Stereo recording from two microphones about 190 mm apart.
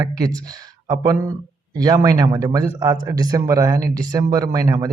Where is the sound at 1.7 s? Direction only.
20° right (ahead or behind).